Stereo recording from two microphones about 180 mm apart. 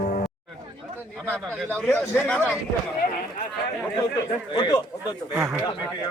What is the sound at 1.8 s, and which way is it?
Speech, 5° left (ahead or behind).